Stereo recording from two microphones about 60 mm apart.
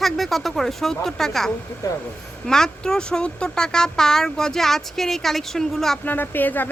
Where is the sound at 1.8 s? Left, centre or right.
Left.